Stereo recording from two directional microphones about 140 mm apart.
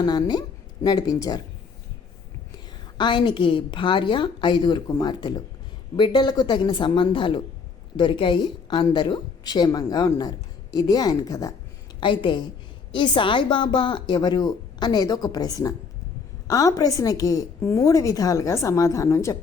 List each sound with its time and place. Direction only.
0.0 s a woman's voice: 30° left (ahead or behind)
3.0 s a woman's voice: 35° left (ahead or behind)
11.9 s a woman's voice: 35° left (ahead or behind)